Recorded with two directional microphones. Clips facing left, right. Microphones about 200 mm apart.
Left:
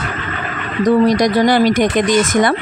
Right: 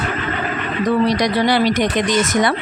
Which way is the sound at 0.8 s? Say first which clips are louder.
Left 5 dB; 45° left (ahead or behind).